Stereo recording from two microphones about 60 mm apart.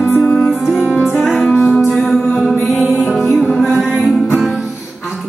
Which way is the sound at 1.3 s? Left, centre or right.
Centre.